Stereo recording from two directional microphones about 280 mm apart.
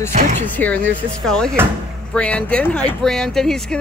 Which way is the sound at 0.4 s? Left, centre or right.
Centre.